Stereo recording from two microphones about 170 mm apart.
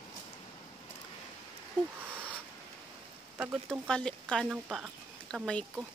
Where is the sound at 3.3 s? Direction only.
10° right (ahead or behind).